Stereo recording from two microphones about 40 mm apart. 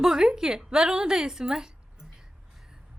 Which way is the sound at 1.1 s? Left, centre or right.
Centre.